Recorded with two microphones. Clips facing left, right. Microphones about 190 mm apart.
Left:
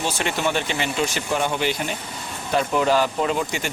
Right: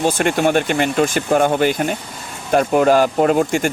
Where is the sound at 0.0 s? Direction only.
50° right (ahead or behind).